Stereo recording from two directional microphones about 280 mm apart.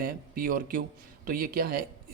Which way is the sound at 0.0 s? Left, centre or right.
Right.